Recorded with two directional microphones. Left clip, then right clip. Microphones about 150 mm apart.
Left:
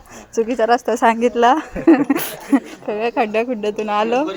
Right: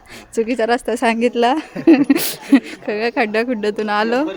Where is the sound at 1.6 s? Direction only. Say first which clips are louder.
Right 1 dB; 30° right (ahead or behind).